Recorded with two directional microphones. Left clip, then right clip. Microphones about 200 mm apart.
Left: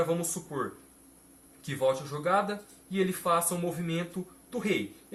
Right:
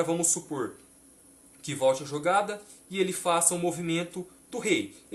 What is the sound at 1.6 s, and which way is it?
Speech, 40° right (ahead or behind).